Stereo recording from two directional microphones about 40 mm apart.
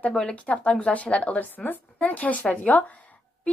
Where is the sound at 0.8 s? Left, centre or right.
Left.